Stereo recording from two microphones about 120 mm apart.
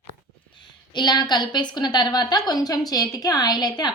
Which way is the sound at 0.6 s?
40° left (ahead or behind).